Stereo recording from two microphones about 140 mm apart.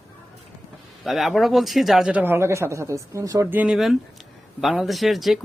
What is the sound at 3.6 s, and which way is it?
Speech, 5° right (ahead or behind).